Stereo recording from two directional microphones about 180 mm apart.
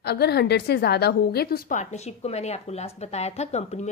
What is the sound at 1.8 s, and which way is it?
A woman's voice, 40° left (ahead or behind).